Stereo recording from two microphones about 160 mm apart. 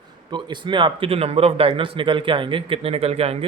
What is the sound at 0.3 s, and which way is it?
Speech, 30° right (ahead or behind).